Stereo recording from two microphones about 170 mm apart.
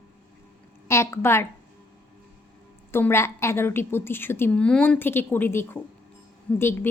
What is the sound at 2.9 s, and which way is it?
A woman's voice, 15° left (ahead or behind).